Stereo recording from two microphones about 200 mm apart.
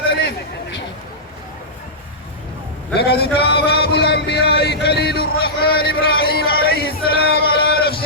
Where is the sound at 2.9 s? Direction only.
50° left (ahead or behind).